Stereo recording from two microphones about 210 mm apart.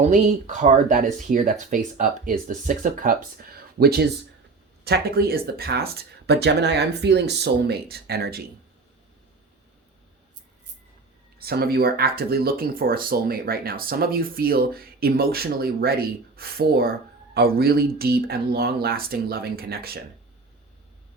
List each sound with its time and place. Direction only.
0.0 s speech: 35° right (ahead or behind)
11.3 s speech: 45° right (ahead or behind)